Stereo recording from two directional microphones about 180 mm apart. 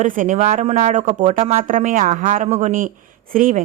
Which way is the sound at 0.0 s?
50° right (ahead or behind).